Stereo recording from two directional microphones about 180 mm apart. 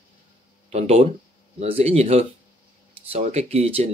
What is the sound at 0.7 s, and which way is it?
Speech, 35° right (ahead or behind).